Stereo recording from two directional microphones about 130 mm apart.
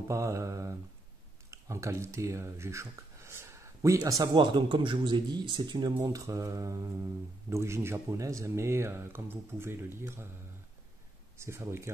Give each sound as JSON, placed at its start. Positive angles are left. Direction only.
{"t": 0.1, "sound": "speech", "side_deg": -20}
{"t": 11.3, "sound": "speech", "side_deg": -20}